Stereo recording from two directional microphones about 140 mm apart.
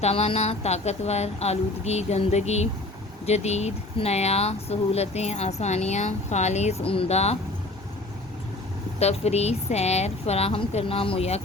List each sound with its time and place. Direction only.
0.0 s speech: 45° left (ahead or behind)
9.0 s speech: 50° left (ahead or behind)